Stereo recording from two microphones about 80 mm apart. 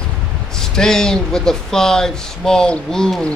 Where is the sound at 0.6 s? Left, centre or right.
Centre.